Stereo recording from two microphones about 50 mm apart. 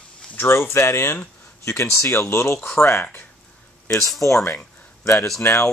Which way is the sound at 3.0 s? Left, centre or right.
Left.